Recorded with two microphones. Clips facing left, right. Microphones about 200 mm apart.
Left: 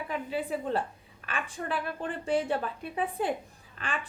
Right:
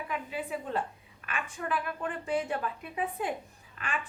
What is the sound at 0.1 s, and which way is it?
Speech, 30° left (ahead or behind).